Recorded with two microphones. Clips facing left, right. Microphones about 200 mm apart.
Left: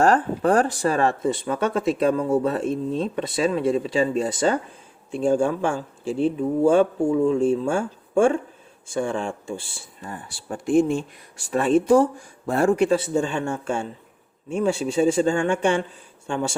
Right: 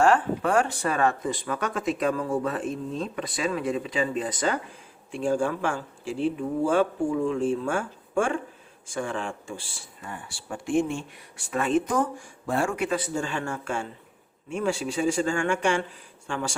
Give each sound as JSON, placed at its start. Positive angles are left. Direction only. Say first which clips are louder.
{"t": 0.0, "sound": "speech", "louder": "left 3 dB", "side_deg": 40}
{"t": 10.1, "sound": "speech", "louder": "left 4 dB", "side_deg": 35}